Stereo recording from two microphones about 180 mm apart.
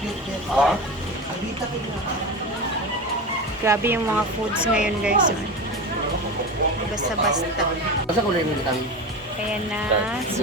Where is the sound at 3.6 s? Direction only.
15° right (ahead or behind).